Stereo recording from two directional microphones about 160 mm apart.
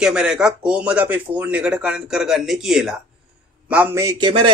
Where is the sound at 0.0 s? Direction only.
5° right (ahead or behind); by 4.3 s 20° right (ahead or behind).